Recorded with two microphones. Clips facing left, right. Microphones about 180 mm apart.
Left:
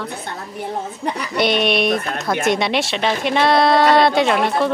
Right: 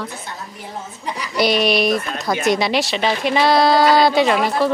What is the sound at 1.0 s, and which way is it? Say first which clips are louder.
Speech: left 1 dB; 60° left (ahead or behind).